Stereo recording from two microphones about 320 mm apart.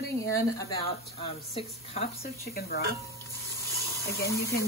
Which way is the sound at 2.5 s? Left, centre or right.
Left.